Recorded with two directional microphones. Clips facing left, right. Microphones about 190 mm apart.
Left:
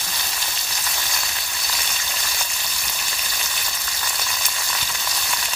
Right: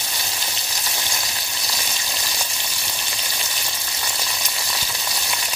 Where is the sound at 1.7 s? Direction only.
20° right (ahead or behind).